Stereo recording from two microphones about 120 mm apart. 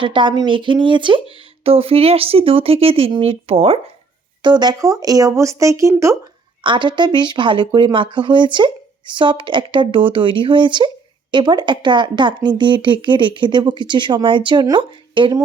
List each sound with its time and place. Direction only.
0.0 s speech: 40° right (ahead or behind)
4.4 s speech: 35° right (ahead or behind)
6.6 s speech: 40° right (ahead or behind)